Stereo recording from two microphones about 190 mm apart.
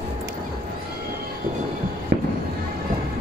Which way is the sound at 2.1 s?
65° right (ahead or behind).